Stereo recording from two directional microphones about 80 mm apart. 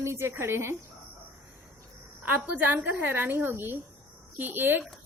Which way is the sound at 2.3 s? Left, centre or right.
Right.